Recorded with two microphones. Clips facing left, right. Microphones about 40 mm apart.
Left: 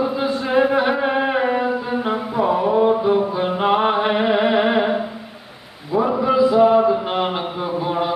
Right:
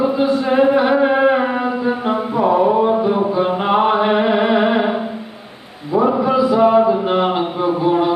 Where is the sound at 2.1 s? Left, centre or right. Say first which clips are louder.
Right 4 dB; right.